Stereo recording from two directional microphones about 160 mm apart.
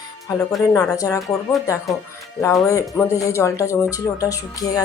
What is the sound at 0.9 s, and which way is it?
Speech, 20° left (ahead or behind).